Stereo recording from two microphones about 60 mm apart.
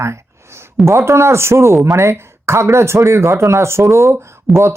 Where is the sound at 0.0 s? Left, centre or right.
Right.